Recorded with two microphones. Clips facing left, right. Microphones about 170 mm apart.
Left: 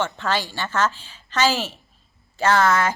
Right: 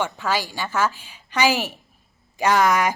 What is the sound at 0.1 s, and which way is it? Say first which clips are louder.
A woman's voice: even; 10° right (ahead or behind).